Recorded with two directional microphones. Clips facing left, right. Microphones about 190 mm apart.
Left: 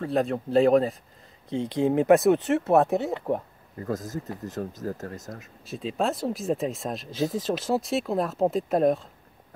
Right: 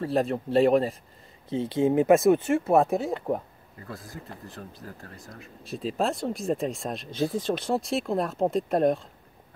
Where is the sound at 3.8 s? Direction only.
45° left (ahead or behind).